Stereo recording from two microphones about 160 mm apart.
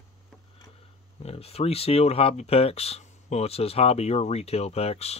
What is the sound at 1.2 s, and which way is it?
Speech, 40° left (ahead or behind).